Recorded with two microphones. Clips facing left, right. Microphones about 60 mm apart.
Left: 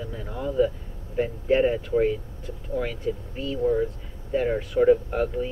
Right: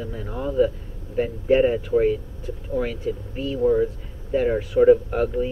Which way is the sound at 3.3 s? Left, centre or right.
Centre.